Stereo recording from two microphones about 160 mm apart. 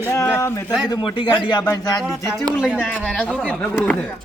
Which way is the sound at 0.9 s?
30° left (ahead or behind).